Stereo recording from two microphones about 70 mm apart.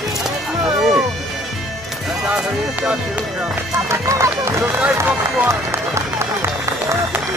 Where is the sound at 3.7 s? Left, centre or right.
Right.